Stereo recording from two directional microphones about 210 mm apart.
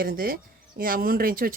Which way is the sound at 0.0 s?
45° right (ahead or behind).